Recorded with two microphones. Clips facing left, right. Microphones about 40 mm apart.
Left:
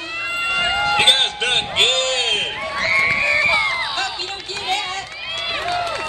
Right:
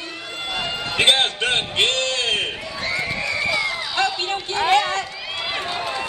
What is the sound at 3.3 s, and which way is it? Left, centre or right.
Run, left.